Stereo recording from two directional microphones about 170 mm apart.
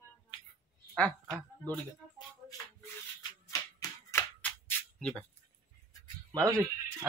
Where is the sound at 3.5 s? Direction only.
20° left (ahead or behind).